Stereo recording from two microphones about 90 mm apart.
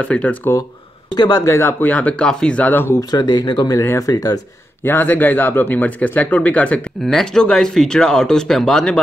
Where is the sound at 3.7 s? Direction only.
35° left (ahead or behind).